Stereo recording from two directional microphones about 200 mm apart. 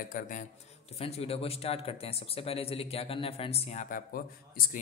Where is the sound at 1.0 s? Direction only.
30° left (ahead or behind).